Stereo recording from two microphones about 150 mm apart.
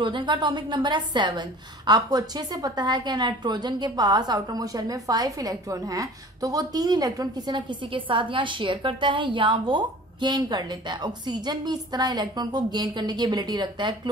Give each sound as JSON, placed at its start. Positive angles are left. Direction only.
{"t": 0.0, "sound": "a woman's voice", "side_deg": -30}